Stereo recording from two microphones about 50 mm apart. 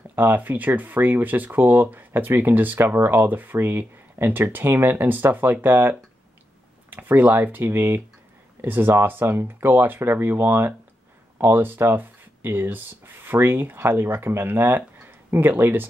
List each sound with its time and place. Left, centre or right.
0.1 s speech: right